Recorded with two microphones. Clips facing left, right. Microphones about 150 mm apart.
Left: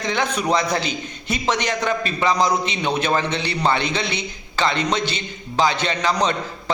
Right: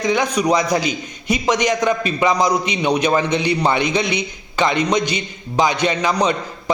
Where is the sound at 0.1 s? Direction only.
10° right (ahead or behind).